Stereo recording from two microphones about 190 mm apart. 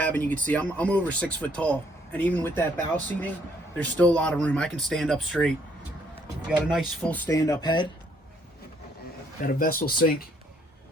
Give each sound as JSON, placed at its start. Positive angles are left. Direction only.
{"t": 0.0, "sound": "speech", "side_deg": 10}
{"t": 6.7, "sound": "speech", "side_deg": 0}
{"t": 9.4, "sound": "speech", "side_deg": 50}